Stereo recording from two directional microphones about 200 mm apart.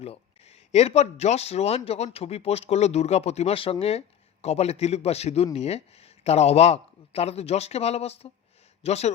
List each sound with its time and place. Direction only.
0.0 s speech: 30° left (ahead or behind)